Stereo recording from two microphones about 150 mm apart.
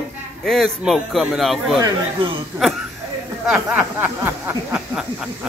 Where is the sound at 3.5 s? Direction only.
15° right (ahead or behind).